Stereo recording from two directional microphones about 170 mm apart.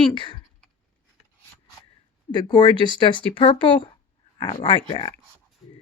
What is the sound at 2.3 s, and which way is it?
Speech, 25° left (ahead or behind).